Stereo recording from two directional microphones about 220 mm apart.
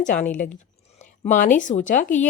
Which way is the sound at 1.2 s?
35° left (ahead or behind).